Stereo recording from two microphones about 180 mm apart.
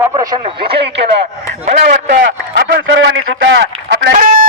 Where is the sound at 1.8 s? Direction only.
50° right (ahead or behind).